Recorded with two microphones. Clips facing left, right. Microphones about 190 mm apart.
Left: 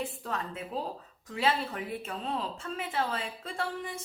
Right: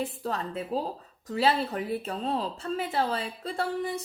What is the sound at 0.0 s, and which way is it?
A woman's voice, 35° right (ahead or behind).